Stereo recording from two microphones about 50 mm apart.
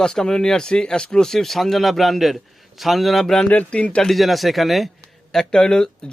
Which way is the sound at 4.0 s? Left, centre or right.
Centre.